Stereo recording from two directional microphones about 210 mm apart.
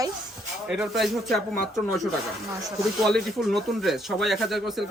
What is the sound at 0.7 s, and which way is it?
Speech, centre (ahead or behind).